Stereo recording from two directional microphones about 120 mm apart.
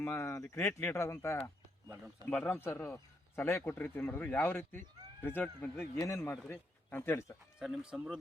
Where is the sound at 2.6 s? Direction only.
20° left (ahead or behind).